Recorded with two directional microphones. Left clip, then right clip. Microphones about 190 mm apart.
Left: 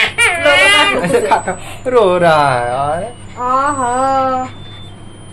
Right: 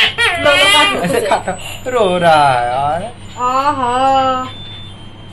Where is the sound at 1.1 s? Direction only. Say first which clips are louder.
Left 2 dB; 40° left (ahead or behind).